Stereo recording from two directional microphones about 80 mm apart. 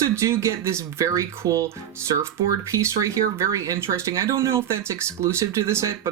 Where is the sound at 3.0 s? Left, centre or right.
Right.